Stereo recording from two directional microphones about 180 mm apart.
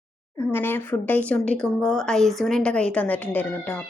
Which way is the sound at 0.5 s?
10° left (ahead or behind).